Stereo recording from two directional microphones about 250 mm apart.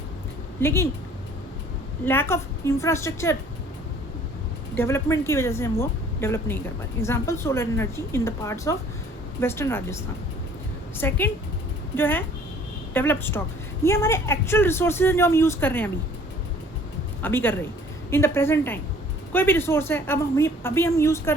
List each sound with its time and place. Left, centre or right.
0.6 s speech: centre
2.0 s speech: centre
4.7 s speech: centre
17.2 s speech: centre